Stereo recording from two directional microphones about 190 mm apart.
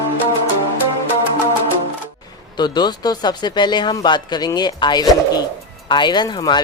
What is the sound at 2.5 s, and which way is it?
Speech, 25° left (ahead or behind).